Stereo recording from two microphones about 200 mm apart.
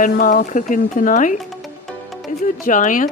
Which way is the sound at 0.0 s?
40° left (ahead or behind).